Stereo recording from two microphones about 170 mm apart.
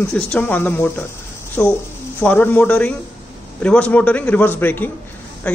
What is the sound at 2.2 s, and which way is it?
Speech, 10° left (ahead or behind).